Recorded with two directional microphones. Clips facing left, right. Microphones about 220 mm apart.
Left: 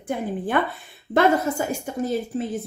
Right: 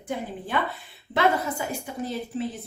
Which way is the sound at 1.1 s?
45° left (ahead or behind).